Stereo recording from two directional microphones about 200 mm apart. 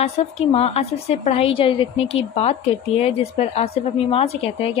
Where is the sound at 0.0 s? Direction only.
30° left (ahead or behind).